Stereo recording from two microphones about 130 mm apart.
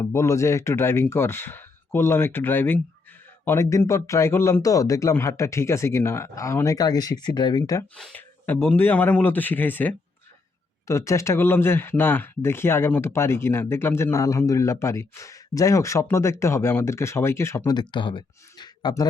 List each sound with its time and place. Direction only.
0.0 s speech: 20° left (ahead or behind)
7.9 s speech: 5° left (ahead or behind)
17.7 s speech: 35° left (ahead or behind)